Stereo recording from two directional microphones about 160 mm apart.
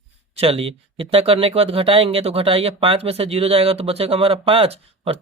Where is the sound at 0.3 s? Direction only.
35° right (ahead or behind).